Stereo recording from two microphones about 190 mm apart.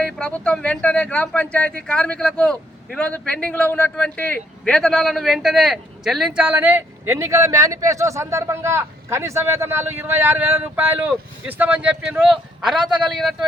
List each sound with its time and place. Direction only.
0.0 s a man's voice: 5° left (ahead or behind)